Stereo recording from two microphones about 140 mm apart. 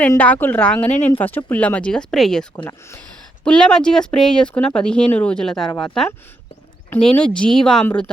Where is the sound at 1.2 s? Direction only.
15° left (ahead or behind).